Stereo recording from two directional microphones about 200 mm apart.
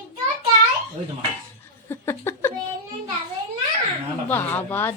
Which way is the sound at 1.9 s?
10° left (ahead or behind).